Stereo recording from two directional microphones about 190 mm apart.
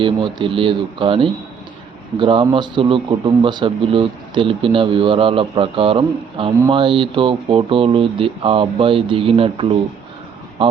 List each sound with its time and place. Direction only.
0.0 s a man's voice: 25° right (ahead or behind)